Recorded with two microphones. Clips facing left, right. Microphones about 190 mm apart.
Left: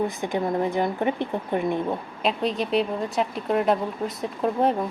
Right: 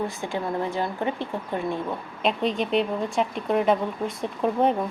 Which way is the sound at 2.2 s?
Centre (ahead or behind).